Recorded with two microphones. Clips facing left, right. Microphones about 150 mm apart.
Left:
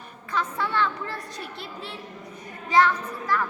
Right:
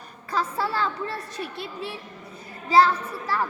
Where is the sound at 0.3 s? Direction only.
35° right (ahead or behind).